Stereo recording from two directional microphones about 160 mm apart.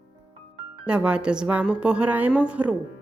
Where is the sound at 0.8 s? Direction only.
5° right (ahead or behind).